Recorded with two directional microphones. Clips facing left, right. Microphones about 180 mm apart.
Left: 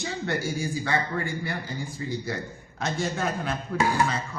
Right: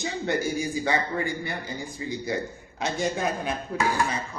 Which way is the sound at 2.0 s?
15° right (ahead or behind).